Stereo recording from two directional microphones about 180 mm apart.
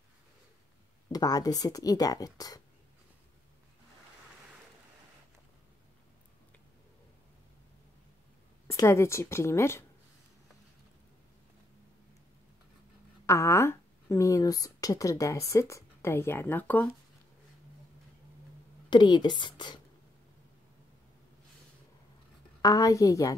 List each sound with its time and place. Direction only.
1.1 s speech: 20° left (ahead or behind)
8.7 s a woman's voice: 15° left (ahead or behind)
13.3 s speech: 15° left (ahead or behind)
18.9 s speech: 25° left (ahead or behind)
22.6 s speech: 20° left (ahead or behind)